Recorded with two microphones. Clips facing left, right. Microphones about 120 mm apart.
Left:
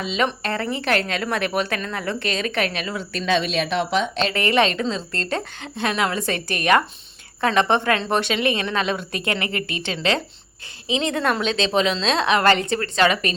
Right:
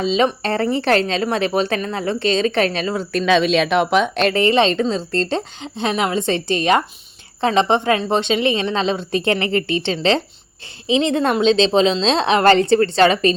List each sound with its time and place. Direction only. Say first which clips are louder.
0.0 s speech: right 6 dB; 30° right (ahead or behind); by 3.2 s 45° right (ahead or behind)
3.2 s speech: right 6 dB; 90° right; by 4.4 s 55° right (ahead or behind)
4.4 s a woman's voice: right 3 dB; 25° right (ahead or behind)
5.5 s speech: right 1 dB; 20° right (ahead or behind)